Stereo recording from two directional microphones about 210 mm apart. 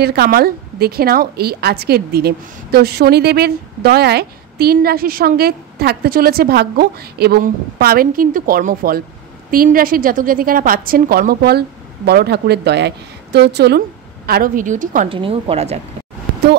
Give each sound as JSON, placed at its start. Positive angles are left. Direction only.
{"t": 0.0, "sound": "a woman's voice", "side_deg": -50}
{"t": 15.0, "sound": "speech", "side_deg": -25}